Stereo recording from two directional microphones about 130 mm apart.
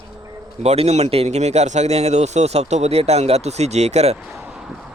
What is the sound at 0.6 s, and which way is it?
Speech, 55° right (ahead or behind).